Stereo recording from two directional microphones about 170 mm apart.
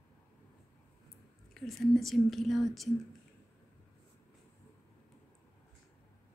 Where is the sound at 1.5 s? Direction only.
Centre (ahead or behind).